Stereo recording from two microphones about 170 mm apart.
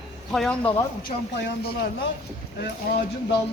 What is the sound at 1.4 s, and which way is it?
Speech, 90° left.